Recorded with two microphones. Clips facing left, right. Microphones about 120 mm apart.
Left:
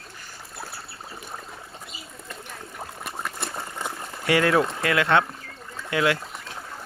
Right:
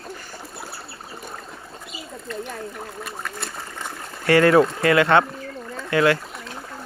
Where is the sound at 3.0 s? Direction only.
5° left (ahead or behind).